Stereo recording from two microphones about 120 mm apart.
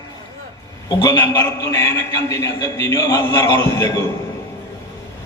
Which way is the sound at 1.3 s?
25° left (ahead or behind).